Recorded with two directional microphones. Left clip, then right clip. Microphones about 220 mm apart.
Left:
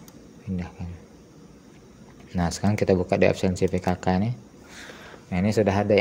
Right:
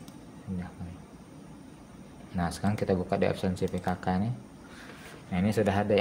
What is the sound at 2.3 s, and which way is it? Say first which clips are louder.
Speech: left 6 dB; 30° left (ahead or behind).